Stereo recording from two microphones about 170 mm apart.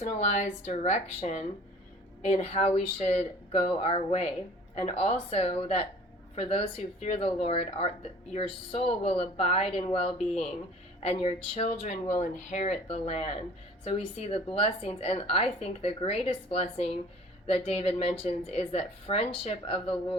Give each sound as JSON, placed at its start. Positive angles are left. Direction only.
{"t": 0.0, "sound": "speech", "side_deg": 45}